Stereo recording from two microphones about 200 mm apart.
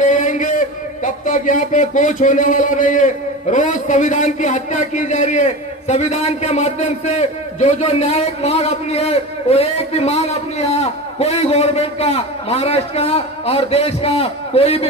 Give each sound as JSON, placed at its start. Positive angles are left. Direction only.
{"t": 0.0, "sound": "a man's voice", "side_deg": 40}